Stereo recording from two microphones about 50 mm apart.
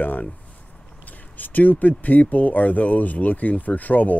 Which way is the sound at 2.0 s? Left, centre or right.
Left.